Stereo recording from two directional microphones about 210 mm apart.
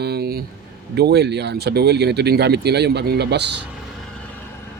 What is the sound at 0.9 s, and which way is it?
Speech, 50° right (ahead or behind).